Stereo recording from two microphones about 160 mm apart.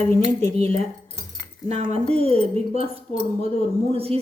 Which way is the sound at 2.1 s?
40° right (ahead or behind).